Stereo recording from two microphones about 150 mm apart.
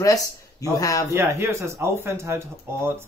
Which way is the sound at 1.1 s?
20° right (ahead or behind).